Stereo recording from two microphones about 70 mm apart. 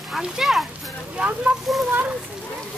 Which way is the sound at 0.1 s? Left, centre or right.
Centre.